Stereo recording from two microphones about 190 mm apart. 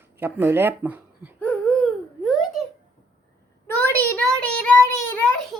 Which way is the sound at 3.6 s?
10° left (ahead or behind).